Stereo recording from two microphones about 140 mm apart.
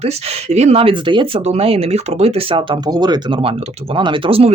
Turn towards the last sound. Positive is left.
turn(degrees=-40)  # may be behind; listen again after turning